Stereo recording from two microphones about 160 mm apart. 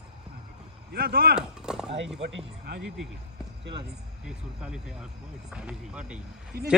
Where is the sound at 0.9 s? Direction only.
75° right (ahead or behind).